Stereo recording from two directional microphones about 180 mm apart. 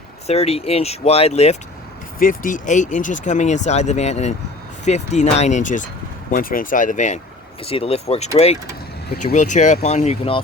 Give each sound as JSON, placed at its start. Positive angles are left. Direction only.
{"t": 0.3, "sound": "speech", "side_deg": 35}
{"t": 2.1, "sound": "speech", "side_deg": 50}